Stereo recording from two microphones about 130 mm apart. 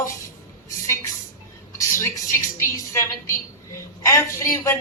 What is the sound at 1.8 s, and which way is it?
A woman's voice, 25° left (ahead or behind).